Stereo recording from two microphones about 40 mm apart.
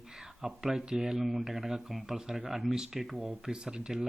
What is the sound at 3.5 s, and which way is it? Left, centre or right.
Speech, right.